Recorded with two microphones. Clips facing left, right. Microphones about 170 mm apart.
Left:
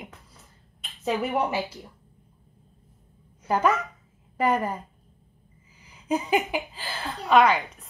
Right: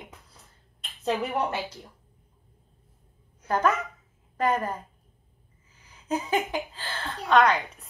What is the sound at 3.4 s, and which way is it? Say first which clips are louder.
A woman's voice: left 2 dB; 10° left (ahead or behind).